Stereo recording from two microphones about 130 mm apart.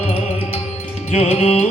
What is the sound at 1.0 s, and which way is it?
Music, 55° left (ahead or behind).